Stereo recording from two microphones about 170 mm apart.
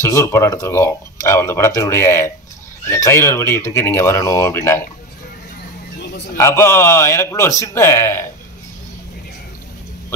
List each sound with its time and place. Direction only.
0.0 s speech: 15° left (ahead or behind)
5.9 s a sound: 80° left
6.3 s speech: 15° left (ahead or behind)